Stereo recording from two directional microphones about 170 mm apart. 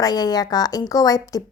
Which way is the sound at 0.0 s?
25° left (ahead or behind).